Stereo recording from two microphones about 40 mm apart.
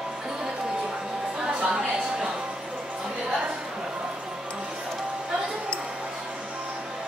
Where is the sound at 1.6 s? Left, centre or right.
Right.